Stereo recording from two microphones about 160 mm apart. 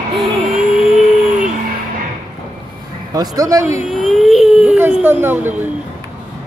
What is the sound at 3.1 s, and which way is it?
Speech, 25° right (ahead or behind).